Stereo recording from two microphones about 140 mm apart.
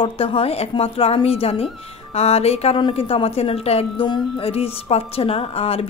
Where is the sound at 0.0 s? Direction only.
40° left (ahead or behind).